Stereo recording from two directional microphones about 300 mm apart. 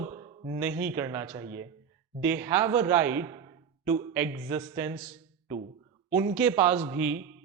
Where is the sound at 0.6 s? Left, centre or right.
Centre.